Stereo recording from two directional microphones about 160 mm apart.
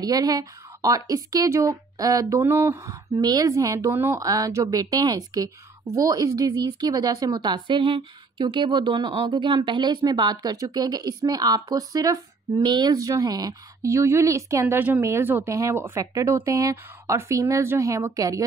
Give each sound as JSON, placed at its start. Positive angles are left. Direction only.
{"t": 0.0, "sound": "a woman's voice", "side_deg": -25}